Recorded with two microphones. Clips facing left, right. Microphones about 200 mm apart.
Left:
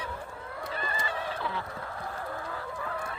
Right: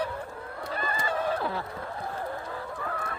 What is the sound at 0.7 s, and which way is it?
Goose, 40° right (ahead or behind).